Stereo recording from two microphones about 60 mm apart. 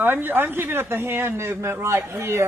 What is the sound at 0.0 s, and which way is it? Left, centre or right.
Speech, right.